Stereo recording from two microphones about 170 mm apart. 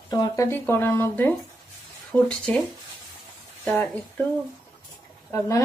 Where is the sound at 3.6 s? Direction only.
10° left (ahead or behind).